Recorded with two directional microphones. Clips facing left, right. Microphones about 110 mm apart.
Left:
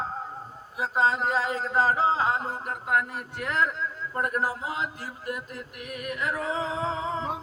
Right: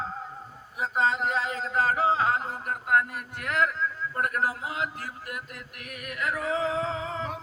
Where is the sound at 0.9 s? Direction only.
35° left (ahead or behind).